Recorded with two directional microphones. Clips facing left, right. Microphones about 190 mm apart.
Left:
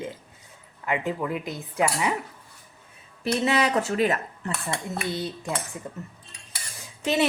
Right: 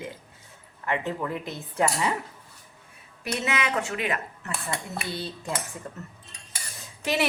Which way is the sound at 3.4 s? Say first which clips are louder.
Left 5 dB; 35° left (ahead or behind).